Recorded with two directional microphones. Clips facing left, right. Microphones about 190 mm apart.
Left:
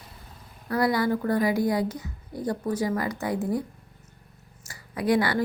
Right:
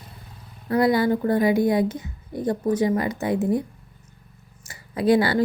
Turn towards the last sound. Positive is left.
turn(degrees=-30)  # may be behind; listen again after turning